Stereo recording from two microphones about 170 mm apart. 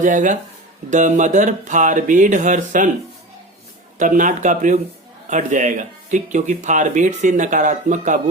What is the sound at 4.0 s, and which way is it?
Speech, 50° right (ahead or behind).